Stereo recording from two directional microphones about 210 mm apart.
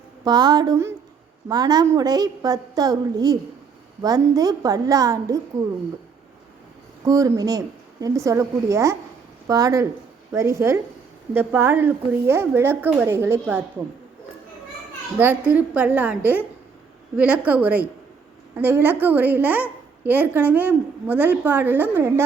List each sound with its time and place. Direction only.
0.3 s a woman's voice: 20° right (ahead or behind)
7.0 s a woman's voice: 15° right (ahead or behind)
15.2 s a woman's voice: 10° right (ahead or behind)